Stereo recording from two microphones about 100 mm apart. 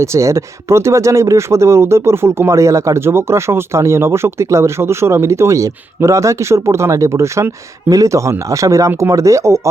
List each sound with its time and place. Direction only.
0.0 s speech: 30° right (ahead or behind)